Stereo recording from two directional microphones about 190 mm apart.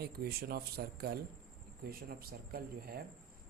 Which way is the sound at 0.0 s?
55° right (ahead or behind).